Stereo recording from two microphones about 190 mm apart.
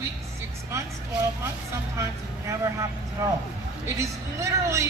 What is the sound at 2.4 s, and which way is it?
A man's voice, 20° right (ahead or behind).